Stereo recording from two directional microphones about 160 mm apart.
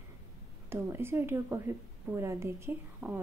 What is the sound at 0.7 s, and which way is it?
A woman's voice, 15° right (ahead or behind).